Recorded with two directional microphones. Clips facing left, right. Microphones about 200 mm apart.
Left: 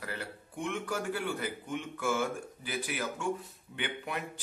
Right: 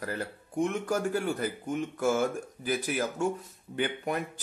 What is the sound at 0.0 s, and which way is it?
Speech, 45° right (ahead or behind).